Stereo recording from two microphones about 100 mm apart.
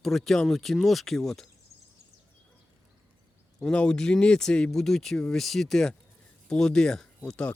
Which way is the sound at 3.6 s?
10° left (ahead or behind).